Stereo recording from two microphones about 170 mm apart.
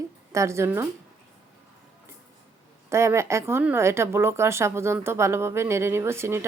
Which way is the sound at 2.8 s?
15° right (ahead or behind).